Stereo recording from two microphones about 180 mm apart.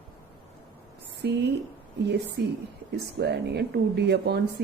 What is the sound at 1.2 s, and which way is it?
A woman's voice, 70° right (ahead or behind).